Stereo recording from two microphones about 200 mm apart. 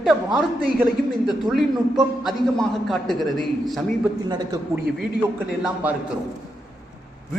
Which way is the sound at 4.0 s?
20° right (ahead or behind).